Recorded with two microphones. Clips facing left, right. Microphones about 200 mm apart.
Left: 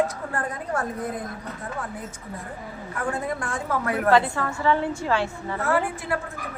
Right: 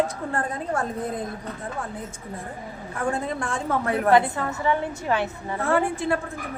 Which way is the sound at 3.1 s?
25° right (ahead or behind).